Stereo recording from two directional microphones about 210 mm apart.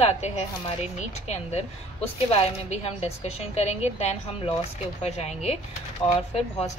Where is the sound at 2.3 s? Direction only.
30° left (ahead or behind).